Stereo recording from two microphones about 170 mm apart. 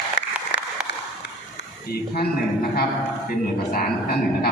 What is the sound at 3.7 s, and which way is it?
Speech, 65° left (ahead or behind).